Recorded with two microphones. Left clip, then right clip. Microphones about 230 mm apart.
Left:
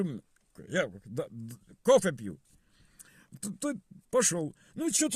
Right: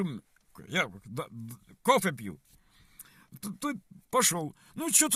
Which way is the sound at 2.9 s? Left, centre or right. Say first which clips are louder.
Left 2 dB; centre.